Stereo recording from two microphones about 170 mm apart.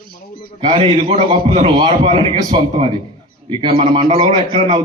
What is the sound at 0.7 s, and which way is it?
A man's voice, 35° right (ahead or behind).